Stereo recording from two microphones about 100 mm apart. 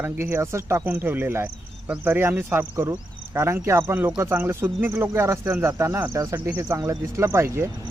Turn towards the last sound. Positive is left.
turn(degrees=-30)  # may be behind; listen again after turning